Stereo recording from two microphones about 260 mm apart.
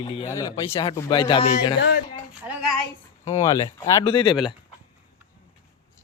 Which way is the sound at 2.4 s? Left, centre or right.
Centre.